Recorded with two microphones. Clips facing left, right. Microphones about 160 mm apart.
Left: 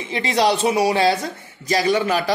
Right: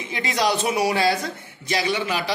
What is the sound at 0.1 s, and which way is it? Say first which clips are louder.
Speech: left 4 dB; 30° left (ahead or behind).